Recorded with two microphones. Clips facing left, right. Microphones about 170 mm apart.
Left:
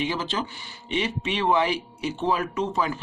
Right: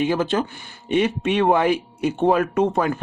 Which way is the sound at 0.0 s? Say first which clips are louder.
Right 7 dB; 50° right (ahead or behind).